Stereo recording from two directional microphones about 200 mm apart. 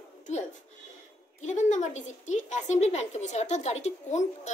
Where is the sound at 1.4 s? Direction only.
35° left (ahead or behind).